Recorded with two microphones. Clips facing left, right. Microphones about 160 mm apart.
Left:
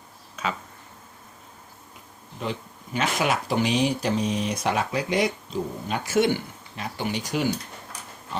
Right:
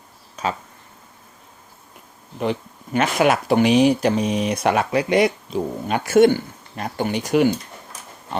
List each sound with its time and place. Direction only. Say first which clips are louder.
2.4 s speech: right 8 dB; 60° right (ahead or behind)